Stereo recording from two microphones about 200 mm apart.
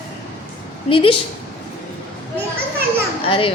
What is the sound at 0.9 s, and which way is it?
Speech, 25° left (ahead or behind).